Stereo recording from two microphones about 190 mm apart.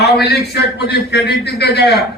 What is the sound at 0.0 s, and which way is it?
A man's voice, 60° left (ahead or behind).